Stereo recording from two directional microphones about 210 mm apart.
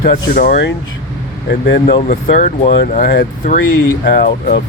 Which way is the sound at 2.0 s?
35° left (ahead or behind).